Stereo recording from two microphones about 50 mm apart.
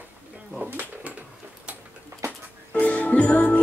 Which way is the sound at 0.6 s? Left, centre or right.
Right.